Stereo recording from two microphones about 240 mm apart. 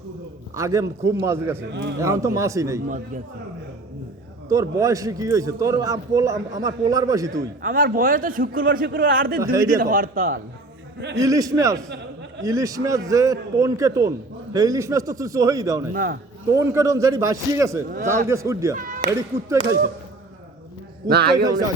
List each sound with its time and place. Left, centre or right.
0.5 s a man's voice: centre
4.4 s a man's voice: centre
7.6 s a man's voice: right
11.1 s a man's voice: centre
15.9 s a man's voice: right
16.5 s a man's voice: centre
18.8 s speech: right
19.1 s a man's voice: centre
21.1 s a man's voice: right